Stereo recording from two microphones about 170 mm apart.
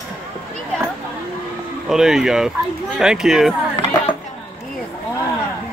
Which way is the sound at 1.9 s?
5° right (ahead or behind).